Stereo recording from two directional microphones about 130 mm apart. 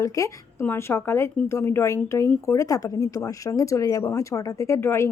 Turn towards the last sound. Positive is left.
turn(degrees=20)  # may be behind; listen again after turning